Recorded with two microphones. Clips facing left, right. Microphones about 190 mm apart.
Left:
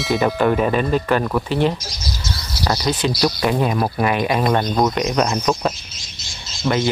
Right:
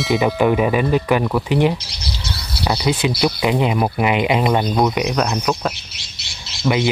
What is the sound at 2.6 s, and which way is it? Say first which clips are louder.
Speech: right 1 dB; 10° right (ahead or behind).